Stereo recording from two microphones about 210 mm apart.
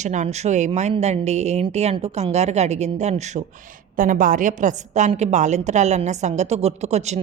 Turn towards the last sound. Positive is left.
turn(degrees=-30)  # may be behind; listen again after turning